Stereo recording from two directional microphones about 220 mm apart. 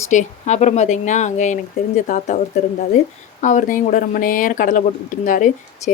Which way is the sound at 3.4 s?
35° left (ahead or behind).